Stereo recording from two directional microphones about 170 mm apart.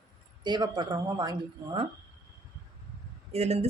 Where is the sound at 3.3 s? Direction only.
40° right (ahead or behind).